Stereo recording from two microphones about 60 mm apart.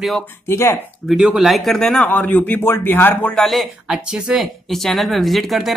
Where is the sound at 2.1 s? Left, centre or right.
Left.